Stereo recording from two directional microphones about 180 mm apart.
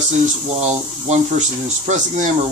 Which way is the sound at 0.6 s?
40° right (ahead or behind).